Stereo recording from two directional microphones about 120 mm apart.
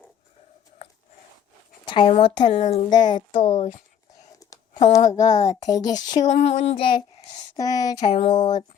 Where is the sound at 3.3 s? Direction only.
70° left (ahead or behind); by 3.8 s 90° left.